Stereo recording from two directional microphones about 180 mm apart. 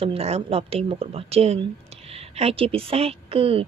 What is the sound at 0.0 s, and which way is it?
A woman's voice, 35° right (ahead or behind).